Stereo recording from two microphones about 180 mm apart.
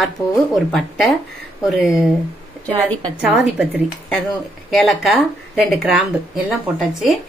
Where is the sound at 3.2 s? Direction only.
5° right (ahead or behind).